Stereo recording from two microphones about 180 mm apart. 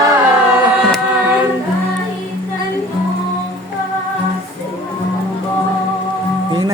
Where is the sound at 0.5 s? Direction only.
5° right (ahead or behind).